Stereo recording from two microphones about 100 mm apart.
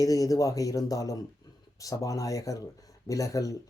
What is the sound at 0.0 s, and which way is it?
Speech, 35° left (ahead or behind).